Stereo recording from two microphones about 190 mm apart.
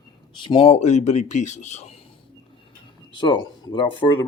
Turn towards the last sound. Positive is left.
turn(degrees=25)  # may be behind; listen again after turning